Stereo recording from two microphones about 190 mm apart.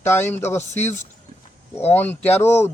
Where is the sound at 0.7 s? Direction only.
35° left (ahead or behind).